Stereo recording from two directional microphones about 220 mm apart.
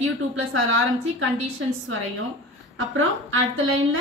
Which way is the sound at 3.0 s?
65° right (ahead or behind).